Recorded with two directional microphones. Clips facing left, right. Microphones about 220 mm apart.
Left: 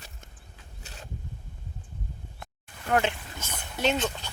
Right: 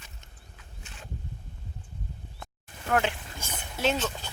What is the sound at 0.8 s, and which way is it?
Vehicle, 40° left (ahead or behind).